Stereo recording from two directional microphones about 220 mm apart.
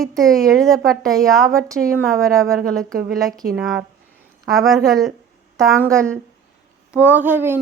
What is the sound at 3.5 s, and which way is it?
Speech, 5° right (ahead or behind).